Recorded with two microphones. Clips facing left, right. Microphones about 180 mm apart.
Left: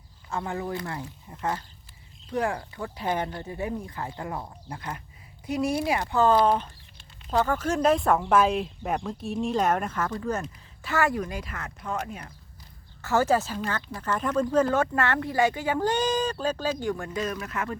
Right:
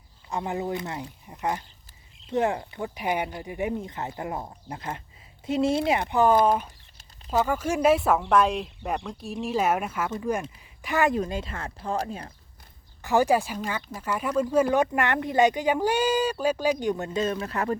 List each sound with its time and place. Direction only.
0.3 s speech: 20° right (ahead or behind)
13.0 s speech: 15° right (ahead or behind); by 17.7 s 35° right (ahead or behind)